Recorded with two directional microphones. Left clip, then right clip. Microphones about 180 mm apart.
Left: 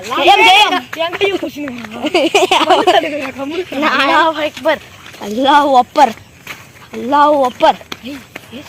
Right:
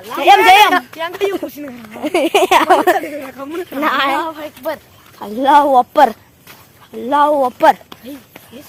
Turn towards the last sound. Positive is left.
turn(degrees=-30)  # may be behind; listen again after turning